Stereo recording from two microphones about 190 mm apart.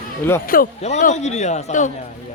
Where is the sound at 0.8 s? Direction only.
40° left (ahead or behind).